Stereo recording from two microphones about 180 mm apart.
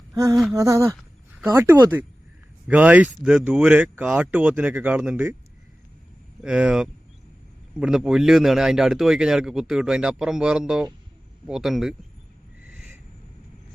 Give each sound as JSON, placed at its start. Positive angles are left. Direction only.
{"t": 0.1, "sound": "a sound", "side_deg": -20}
{"t": 0.5, "sound": "speech", "side_deg": -15}
{"t": 6.4, "sound": "speech", "side_deg": -5}
{"t": 12.7, "sound": "owl", "side_deg": -5}